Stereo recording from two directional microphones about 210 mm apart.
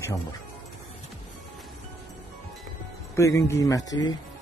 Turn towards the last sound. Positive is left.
turn(degrees=20)  # may be behind; listen again after turning